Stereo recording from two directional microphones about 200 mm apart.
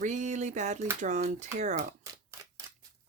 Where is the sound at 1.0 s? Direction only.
40° right (ahead or behind).